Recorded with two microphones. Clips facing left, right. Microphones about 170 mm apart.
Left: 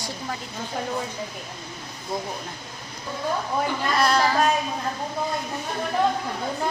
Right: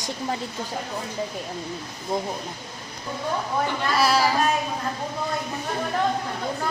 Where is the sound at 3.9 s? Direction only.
5° right (ahead or behind).